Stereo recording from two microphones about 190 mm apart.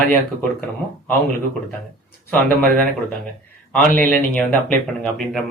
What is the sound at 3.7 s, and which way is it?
Speech, 10° left (ahead or behind).